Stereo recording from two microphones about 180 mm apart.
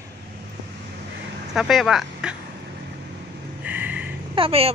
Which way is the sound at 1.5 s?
Centre (ahead or behind).